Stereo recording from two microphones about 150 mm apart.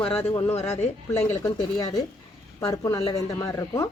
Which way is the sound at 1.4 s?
25° left (ahead or behind).